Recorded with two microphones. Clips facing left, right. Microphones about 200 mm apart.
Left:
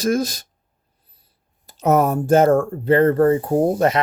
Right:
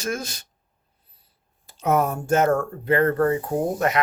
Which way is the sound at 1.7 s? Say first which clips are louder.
Left 5 dB; 40° left (ahead or behind).